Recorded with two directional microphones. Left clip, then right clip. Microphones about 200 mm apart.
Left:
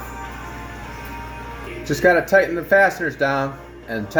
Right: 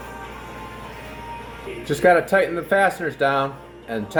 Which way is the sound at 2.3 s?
Centre (ahead or behind).